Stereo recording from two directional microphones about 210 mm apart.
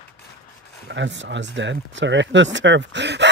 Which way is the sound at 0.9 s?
60° right (ahead or behind).